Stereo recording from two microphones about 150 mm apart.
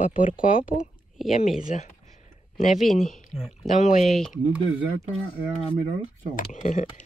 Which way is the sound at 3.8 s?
50° left (ahead or behind).